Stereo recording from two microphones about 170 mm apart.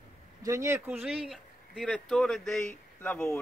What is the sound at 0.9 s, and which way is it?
Speech, 5° right (ahead or behind).